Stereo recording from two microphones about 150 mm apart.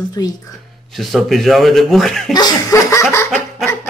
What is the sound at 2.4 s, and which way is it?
Speech, 25° left (ahead or behind).